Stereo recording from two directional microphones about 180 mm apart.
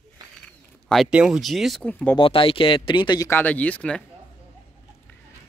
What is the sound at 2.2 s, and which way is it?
Speech, 30° left (ahead or behind).